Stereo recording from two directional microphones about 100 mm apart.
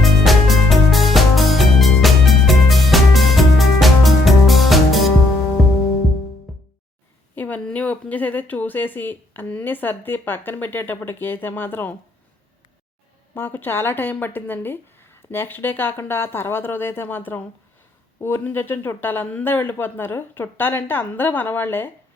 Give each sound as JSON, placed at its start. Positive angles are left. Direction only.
{"t": 0.0, "sound": "music", "side_deg": 0}
{"t": 7.3, "sound": "speech", "side_deg": 15}
{"t": 13.3, "sound": "speech", "side_deg": 20}